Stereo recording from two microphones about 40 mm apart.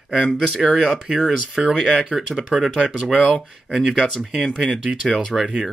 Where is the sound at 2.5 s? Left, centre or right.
Right.